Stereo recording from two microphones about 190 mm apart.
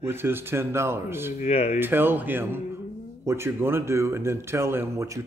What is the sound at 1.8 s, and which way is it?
Speech, 10° right (ahead or behind).